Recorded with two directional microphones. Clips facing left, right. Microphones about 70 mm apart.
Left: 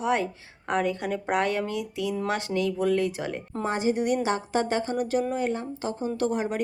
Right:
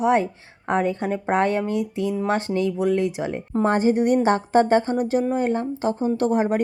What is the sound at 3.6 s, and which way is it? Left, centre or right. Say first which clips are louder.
Speech: right 7 dB; right.